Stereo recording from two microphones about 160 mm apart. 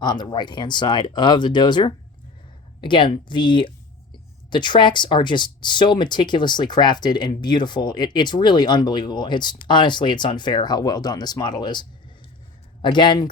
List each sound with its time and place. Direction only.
0.0 s speech: 25° left (ahead or behind)